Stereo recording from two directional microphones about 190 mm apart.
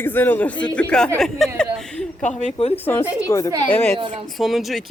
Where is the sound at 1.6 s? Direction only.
5° left (ahead or behind).